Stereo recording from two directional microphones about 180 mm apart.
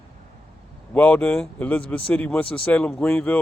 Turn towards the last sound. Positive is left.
turn(degrees=5)  # may be behind; listen again after turning